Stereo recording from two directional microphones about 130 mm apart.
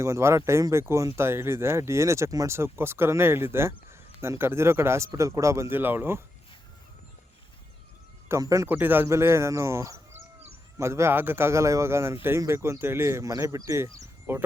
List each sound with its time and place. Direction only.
0.0 s speech: 20° right (ahead or behind)
8.3 s speech: 25° right (ahead or behind)